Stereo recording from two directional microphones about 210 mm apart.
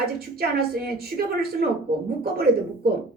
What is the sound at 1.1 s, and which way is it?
Speech, 45° right (ahead or behind).